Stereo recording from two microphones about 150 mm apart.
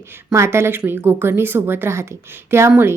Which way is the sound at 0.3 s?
15° right (ahead or behind).